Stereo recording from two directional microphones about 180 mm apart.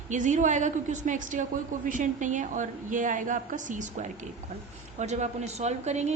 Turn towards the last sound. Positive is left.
turn(degrees=-40)  # may be behind; listen again after turning